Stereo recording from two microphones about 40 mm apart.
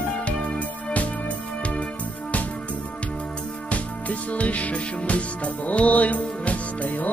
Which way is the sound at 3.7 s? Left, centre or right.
Left.